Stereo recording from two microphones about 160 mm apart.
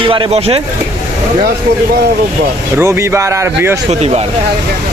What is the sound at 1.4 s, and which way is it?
Speech, 80° right.